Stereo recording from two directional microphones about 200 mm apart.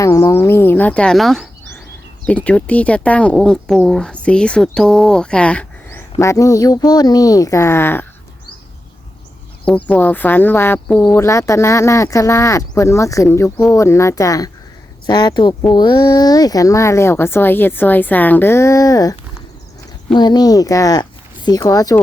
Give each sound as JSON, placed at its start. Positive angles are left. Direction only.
{"t": 0.0, "sound": "speech", "side_deg": 15}
{"t": 9.6, "sound": "speech", "side_deg": 5}
{"t": 20.1, "sound": "speech", "side_deg": 20}